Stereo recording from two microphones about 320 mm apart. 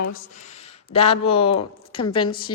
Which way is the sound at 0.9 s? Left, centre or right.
Centre.